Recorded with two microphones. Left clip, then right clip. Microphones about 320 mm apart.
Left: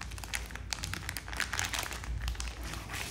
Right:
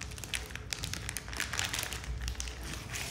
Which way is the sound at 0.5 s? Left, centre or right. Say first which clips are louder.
Even; centre.